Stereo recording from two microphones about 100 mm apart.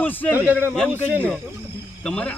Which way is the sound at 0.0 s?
15° left (ahead or behind).